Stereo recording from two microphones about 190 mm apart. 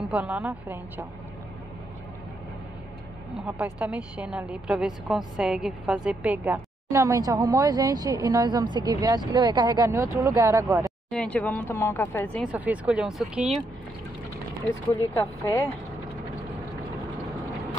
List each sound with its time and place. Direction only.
0.1 s a woman's voice: 5° right (ahead or behind)
3.4 s a woman's voice: 10° right (ahead or behind)
11.1 s speech: 5° left (ahead or behind)
12.4 s a woman's voice: 10° right (ahead or behind)
15.1 s speech: 15° left (ahead or behind)